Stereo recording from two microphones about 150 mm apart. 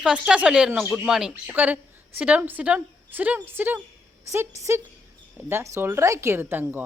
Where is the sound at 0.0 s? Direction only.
5° right (ahead or behind).